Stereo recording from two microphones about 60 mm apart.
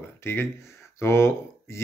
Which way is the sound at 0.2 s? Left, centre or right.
Left.